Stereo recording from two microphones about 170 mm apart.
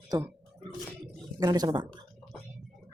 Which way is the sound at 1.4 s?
20° right (ahead or behind).